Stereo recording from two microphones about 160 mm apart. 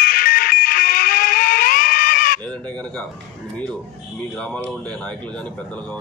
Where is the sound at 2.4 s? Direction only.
10° left (ahead or behind).